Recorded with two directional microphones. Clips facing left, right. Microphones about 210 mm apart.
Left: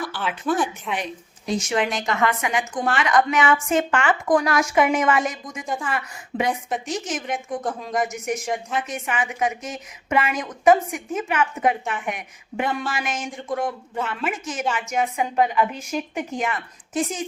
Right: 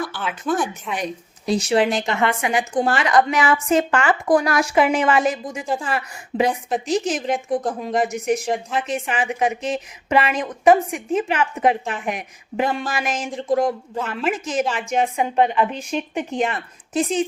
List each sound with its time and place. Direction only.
0.1 s speech: 5° left (ahead or behind)
0.9 s a woman's voice: 40° right (ahead or behind)
7.6 s speech: 10° right (ahead or behind)
7.9 s a woman's voice: 30° right (ahead or behind)